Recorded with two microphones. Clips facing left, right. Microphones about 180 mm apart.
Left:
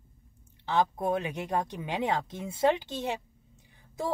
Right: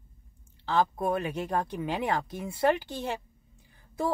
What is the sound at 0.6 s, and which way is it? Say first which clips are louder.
Speech: right 1 dB; 15° left (ahead or behind).